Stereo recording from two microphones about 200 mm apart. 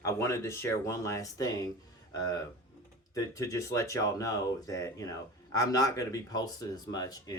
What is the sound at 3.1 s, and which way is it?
Speech, 15° left (ahead or behind).